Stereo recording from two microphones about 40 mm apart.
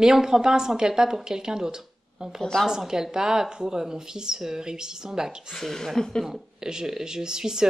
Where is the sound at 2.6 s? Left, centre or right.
Centre.